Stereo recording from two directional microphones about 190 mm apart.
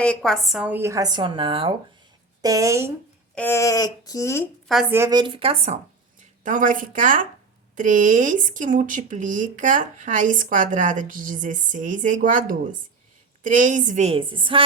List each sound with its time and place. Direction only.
0.0 s speech: 5° left (ahead or behind); by 2.9 s 15° right (ahead or behind)
3.3 s speech: 10° left (ahead or behind)
4.7 s a woman's voice: centre (ahead or behind)
4.9 s a woman's voice: 20° right (ahead or behind)